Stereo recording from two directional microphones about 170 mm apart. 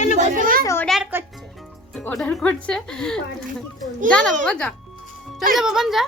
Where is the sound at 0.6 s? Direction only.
15° left (ahead or behind).